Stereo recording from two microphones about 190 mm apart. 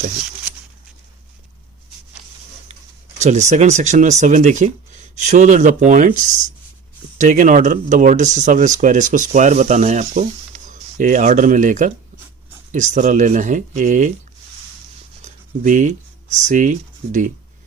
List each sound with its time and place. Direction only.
3.2 s speech: 35° right (ahead or behind)
15.2 s speech: 40° right (ahead or behind)